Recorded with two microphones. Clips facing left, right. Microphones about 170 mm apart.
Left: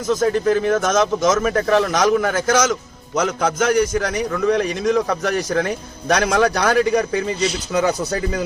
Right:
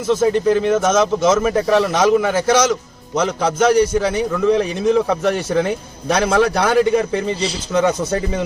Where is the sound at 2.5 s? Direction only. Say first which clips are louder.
Right 3 dB; 30° right (ahead or behind).